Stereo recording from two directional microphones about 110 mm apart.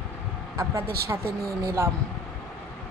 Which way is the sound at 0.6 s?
25° right (ahead or behind).